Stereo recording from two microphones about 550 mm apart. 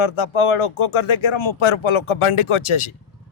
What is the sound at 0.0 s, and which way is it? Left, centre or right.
A man's voice, left.